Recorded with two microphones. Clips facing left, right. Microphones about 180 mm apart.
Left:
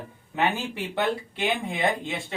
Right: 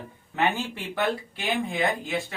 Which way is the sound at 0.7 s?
25° left (ahead or behind).